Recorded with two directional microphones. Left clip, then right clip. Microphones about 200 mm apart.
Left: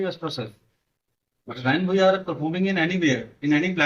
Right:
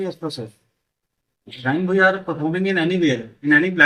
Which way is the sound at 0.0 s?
Centre (ahead or behind).